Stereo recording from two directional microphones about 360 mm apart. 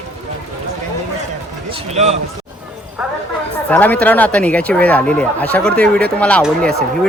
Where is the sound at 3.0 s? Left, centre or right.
Centre.